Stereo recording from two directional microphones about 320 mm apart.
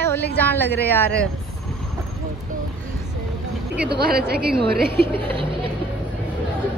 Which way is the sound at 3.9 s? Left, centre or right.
Right.